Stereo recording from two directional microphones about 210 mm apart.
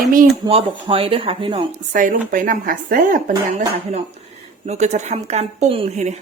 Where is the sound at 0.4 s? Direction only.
25° right (ahead or behind).